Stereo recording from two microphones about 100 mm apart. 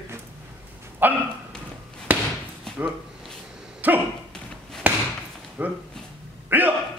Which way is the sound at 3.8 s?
20° right (ahead or behind).